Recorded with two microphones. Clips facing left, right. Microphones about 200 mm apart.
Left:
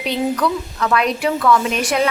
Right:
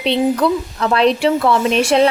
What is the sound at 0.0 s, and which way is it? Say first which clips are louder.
A woman's voice: right 4 dB; 30° right (ahead or behind).